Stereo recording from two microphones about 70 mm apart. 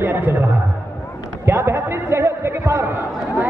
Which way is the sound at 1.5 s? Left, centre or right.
Right.